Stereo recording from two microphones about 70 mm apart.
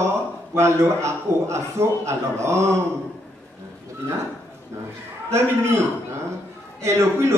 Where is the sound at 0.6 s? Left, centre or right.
Right.